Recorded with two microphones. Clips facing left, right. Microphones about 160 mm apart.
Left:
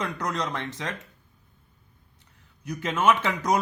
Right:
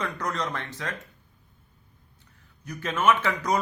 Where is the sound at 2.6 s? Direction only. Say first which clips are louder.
Left 1 dB; 15° left (ahead or behind).